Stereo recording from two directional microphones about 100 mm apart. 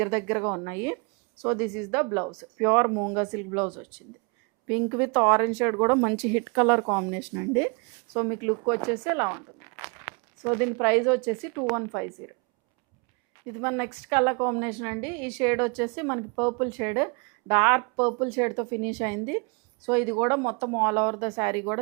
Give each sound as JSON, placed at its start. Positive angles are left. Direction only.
{"t": 0.0, "sound": "a woman's voice", "side_deg": -15}
{"t": 13.5, "sound": "a woman's voice", "side_deg": -20}